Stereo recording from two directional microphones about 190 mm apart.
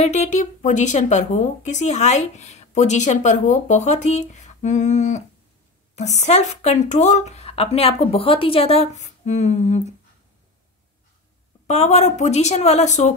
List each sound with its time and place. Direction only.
0.0 s speech: 35° left (ahead or behind)
11.6 s speech: 35° left (ahead or behind)